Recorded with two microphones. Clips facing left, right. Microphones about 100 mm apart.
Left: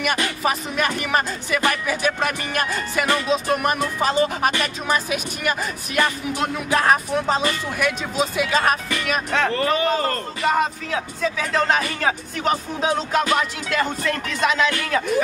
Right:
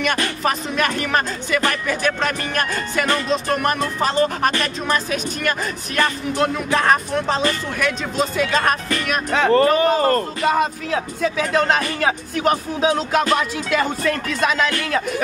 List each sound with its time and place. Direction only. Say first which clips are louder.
0.0 s speech: right 1 dB; 10° left (ahead or behind)
9.5 s speech: right 10 dB; 40° right (ahead or behind)
10.4 s speech: right 2 dB; 5° right (ahead or behind)